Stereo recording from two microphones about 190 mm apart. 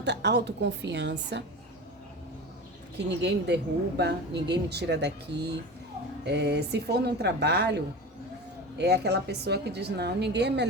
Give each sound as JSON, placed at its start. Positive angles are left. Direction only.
{"t": 0.0, "sound": "speech", "side_deg": -65}
{"t": 3.2, "sound": "speech", "side_deg": -65}
{"t": 8.8, "sound": "speech", "side_deg": -60}